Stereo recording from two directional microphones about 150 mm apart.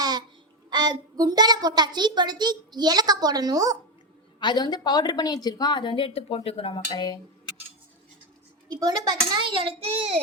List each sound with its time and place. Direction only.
0.0 s child singing: 30° right (ahead or behind)
0.7 s a child's voice: 25° right (ahead or behind)
4.4 s a woman's voice: 30° left (ahead or behind)
8.8 s a child's voice: 25° right (ahead or behind)